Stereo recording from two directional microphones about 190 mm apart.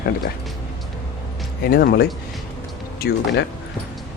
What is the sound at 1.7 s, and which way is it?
A man's voice, 50° left (ahead or behind).